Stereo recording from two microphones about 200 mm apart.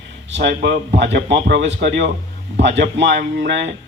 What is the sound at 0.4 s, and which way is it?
A man's voice, 60° right (ahead or behind).